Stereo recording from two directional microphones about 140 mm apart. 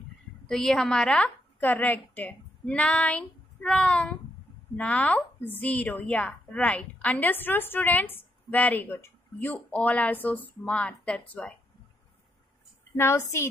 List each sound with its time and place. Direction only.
0.5 s a woman's voice: 5° left (ahead or behind)
12.9 s a woman's voice: 20° left (ahead or behind)